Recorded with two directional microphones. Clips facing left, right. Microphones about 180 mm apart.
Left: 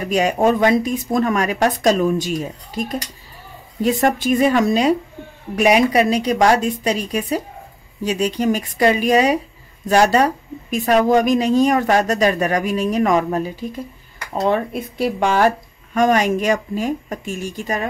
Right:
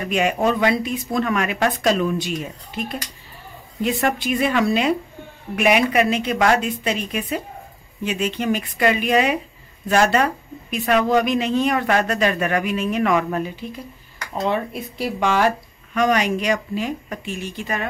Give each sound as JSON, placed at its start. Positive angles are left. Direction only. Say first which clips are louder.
{"t": 0.1, "sound": "a woman's voice", "louder": "left 4 dB", "side_deg": 40}
{"t": 14.5, "sound": "speech", "louder": "left 4 dB", "side_deg": 50}